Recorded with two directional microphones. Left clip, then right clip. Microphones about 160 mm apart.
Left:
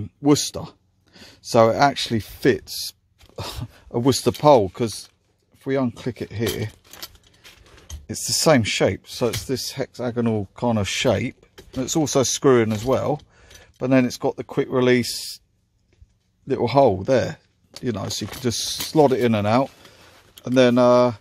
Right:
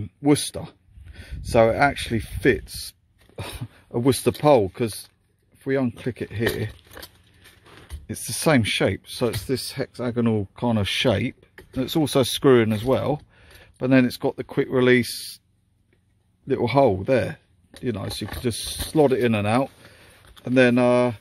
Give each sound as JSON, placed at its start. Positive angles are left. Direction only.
{"t": 0.0, "sound": "speech", "side_deg": 10}
{"t": 8.1, "sound": "speech", "side_deg": 10}
{"t": 16.4, "sound": "speech", "side_deg": 5}
{"t": 20.4, "sound": "speech", "side_deg": 5}